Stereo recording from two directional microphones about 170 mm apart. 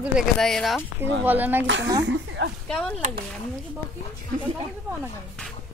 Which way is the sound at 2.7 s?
5° left (ahead or behind).